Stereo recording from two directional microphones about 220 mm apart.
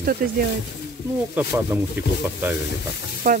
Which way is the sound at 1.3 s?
10° right (ahead or behind).